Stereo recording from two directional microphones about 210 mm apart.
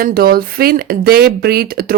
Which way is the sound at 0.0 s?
45° right (ahead or behind).